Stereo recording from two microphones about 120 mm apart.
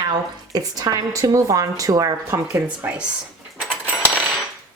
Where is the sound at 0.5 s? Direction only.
30° right (ahead or behind).